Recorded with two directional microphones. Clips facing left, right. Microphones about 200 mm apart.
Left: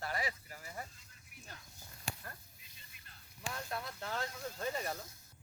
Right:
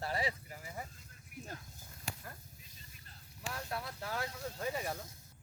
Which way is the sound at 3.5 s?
5° right (ahead or behind).